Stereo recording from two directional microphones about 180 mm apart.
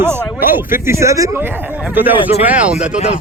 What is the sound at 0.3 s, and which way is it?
A man's voice, 10° right (ahead or behind).